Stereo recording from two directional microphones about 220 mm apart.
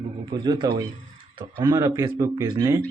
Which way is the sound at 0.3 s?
20° right (ahead or behind).